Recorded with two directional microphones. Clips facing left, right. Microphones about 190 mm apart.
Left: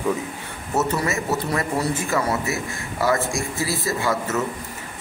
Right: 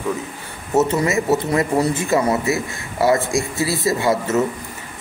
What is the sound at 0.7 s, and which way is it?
Speech, 20° right (ahead or behind).